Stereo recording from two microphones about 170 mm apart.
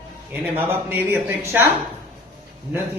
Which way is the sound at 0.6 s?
10° right (ahead or behind).